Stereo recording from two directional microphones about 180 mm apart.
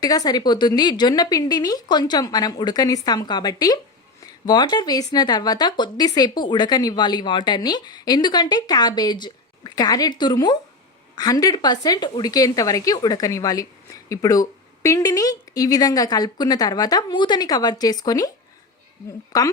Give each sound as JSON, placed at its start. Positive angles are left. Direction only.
{"t": 0.0, "sound": "a woman's voice", "side_deg": 20}
{"t": 19.3, "sound": "a woman's voice", "side_deg": 20}